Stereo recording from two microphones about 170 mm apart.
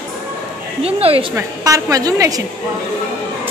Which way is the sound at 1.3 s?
20° right (ahead or behind).